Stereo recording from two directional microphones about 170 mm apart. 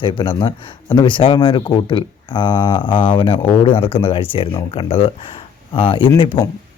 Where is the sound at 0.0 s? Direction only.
30° left (ahead or behind).